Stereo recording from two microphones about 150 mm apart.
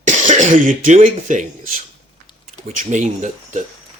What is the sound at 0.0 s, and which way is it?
Cough, 60° right (ahead or behind).